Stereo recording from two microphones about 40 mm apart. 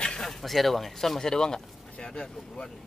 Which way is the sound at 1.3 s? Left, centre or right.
Centre.